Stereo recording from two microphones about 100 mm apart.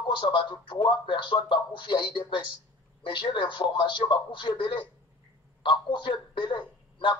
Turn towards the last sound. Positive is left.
turn(degrees=55)  # may be behind; listen again after turning